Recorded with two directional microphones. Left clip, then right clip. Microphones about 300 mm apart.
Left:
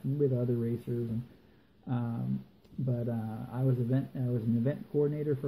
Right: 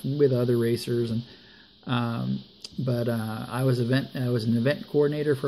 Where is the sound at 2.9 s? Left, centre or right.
Right.